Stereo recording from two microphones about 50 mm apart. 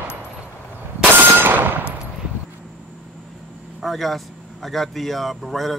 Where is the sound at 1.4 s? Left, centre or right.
Right.